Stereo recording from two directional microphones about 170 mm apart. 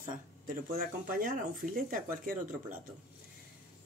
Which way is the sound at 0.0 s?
55° right (ahead or behind).